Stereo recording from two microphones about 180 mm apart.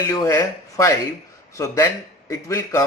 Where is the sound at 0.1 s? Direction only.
15° left (ahead or behind).